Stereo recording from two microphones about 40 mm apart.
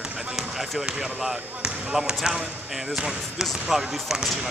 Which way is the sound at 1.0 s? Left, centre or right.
Centre.